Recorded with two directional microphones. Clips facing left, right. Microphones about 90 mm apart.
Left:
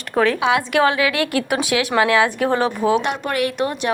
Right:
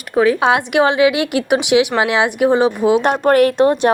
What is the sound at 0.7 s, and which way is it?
A woman's voice, 20° right (ahead or behind).